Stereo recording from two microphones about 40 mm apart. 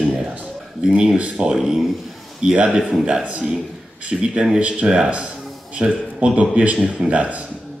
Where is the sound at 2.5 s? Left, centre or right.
Right.